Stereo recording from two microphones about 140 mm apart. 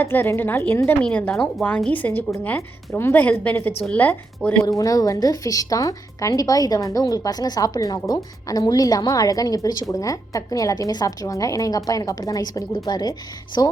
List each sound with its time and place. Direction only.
0.0 s a woman's voice: 15° left (ahead or behind)
4.4 s speech: 5° right (ahead or behind)
4.8 s a woman's voice: 25° left (ahead or behind)